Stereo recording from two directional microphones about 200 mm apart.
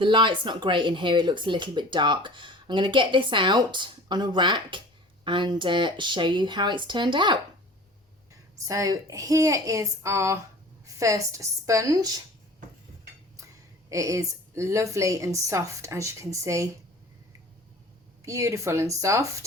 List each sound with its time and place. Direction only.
0.0 s speech: 25° right (ahead or behind)
8.5 s a woman's voice: 15° right (ahead or behind)
13.9 s a woman's voice: 15° right (ahead or behind)
18.3 s a woman's voice: 15° right (ahead or behind)